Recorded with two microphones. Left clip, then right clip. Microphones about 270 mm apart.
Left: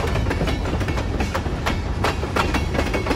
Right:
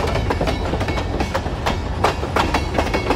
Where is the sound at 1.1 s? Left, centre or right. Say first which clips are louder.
Right 3 dB; right.